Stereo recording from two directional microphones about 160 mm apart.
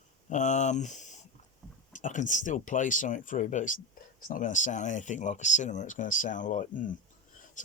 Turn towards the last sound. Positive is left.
turn(degrees=55)  # may be behind; listen again after turning